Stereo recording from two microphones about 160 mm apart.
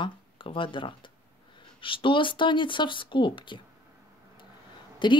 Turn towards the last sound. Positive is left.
turn(degrees=30)  # may be behind; listen again after turning